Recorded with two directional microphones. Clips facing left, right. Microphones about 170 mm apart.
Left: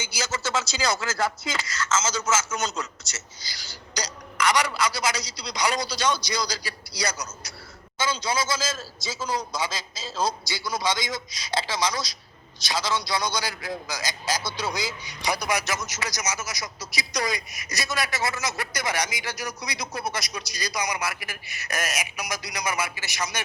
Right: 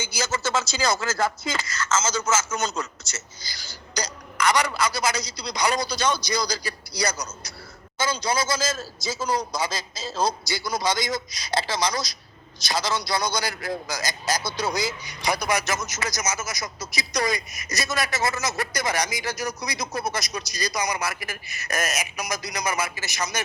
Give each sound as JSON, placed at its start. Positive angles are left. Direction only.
{"t": 0.0, "sound": "speech", "side_deg": -50}
{"t": 7.9, "sound": "a man's voice", "side_deg": -40}